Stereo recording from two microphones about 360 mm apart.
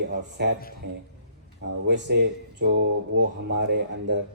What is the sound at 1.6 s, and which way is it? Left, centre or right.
Speech, right.